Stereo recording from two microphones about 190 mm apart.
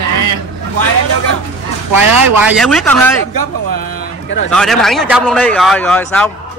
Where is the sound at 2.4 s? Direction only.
Centre (ahead or behind).